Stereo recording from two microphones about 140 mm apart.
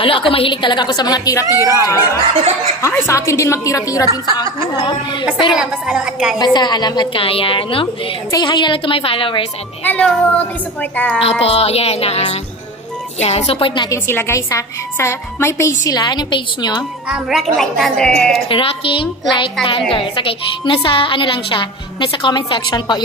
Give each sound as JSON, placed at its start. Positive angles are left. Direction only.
{"t": 0.0, "sound": "a woman's voice", "side_deg": 40}
{"t": 5.6, "sound": "a woman's voice", "side_deg": -5}
{"t": 6.3, "sound": "speech", "side_deg": 30}
{"t": 9.8, "sound": "a woman's voice", "side_deg": 10}
{"t": 11.1, "sound": "speech", "side_deg": 45}
{"t": 13.8, "sound": "a woman's voice", "side_deg": 20}
{"t": 17.1, "sound": "a woman's voice", "side_deg": 0}
{"t": 18.5, "sound": "speech", "side_deg": 40}